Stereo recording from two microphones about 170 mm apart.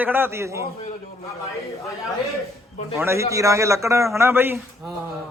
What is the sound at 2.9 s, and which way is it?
A man's voice, 15° right (ahead or behind).